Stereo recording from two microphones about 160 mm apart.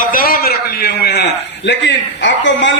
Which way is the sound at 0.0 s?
60° left (ahead or behind).